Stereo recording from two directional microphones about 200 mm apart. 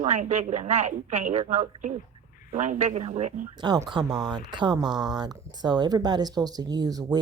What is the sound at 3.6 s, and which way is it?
Speech, 20° right (ahead or behind).